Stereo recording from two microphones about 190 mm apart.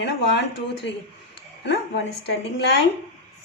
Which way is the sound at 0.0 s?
65° left (ahead or behind).